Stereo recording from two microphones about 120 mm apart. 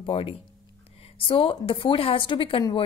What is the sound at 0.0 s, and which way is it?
A woman's voice, 50° left (ahead or behind).